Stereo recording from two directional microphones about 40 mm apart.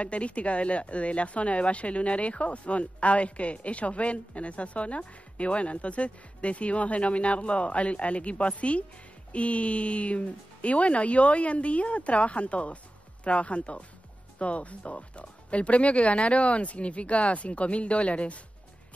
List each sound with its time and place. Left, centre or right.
0.0 s speech: left